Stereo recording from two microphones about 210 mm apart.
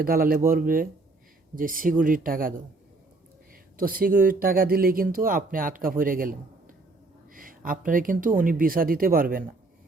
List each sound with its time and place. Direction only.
0.0 s speech: 45° right (ahead or behind)
3.8 s speech: 40° right (ahead or behind)
7.3 s speech: 40° right (ahead or behind)